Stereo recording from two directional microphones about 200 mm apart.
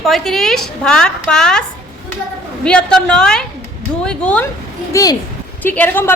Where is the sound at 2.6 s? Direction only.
5° left (ahead or behind).